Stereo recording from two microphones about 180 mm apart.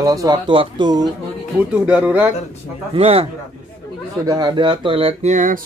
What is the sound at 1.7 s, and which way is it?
Speech, 10° right (ahead or behind).